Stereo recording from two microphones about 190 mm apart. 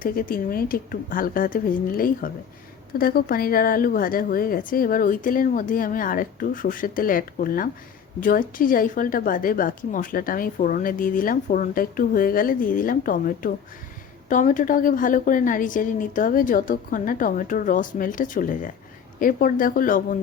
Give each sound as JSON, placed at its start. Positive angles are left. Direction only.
{"t": 0.0, "sound": "a woman's voice", "side_deg": 50}